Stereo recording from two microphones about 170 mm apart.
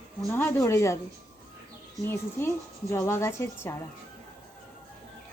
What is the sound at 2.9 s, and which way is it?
Speech, 15° left (ahead or behind).